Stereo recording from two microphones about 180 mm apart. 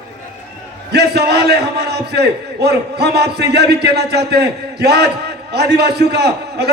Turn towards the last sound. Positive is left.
turn(degrees=-65)  # may be behind; listen again after turning